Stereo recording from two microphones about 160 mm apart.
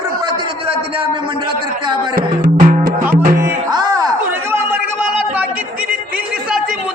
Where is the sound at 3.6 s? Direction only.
25° right (ahead or behind).